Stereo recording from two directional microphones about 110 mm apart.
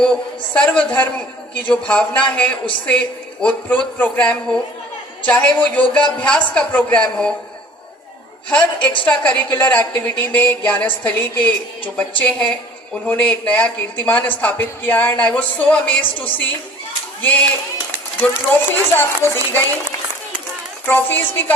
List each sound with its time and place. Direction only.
0.0 s speech: 10° left (ahead or behind)
8.4 s speech: 15° left (ahead or behind)
17.2 s speech: 15° left (ahead or behind)
20.8 s speech: 15° left (ahead or behind)